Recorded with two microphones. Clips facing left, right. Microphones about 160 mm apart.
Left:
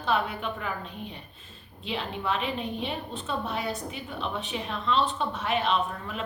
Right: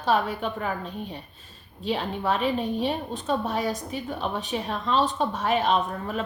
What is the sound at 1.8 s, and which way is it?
A woman's voice, 40° right (ahead or behind).